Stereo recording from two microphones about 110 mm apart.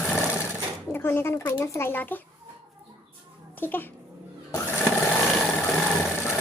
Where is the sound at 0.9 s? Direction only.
20° left (ahead or behind).